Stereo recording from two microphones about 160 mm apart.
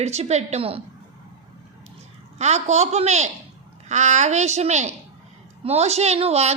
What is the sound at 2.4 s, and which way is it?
Speech, 45° right (ahead or behind).